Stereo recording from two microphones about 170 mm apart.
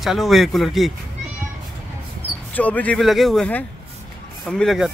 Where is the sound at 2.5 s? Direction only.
10° left (ahead or behind).